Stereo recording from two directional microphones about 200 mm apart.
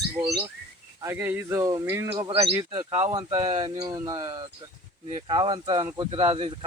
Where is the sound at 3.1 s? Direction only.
20° right (ahead or behind).